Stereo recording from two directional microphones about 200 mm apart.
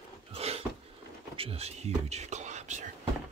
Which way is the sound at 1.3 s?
30° right (ahead or behind).